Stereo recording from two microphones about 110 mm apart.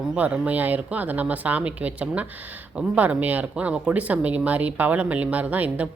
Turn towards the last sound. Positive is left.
turn(degrees=-15)  # may be behind; listen again after turning